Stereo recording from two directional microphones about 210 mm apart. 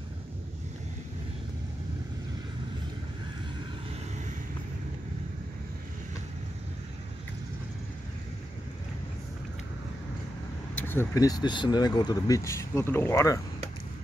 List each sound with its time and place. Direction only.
10.8 s speech: 10° left (ahead or behind)